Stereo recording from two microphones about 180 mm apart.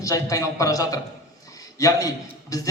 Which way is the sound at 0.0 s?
20° left (ahead or behind).